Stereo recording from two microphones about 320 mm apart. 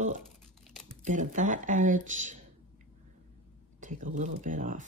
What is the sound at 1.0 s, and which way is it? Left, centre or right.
Speech, right.